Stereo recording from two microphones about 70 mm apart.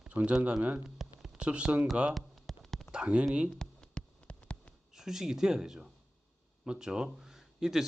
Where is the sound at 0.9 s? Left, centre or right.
Centre.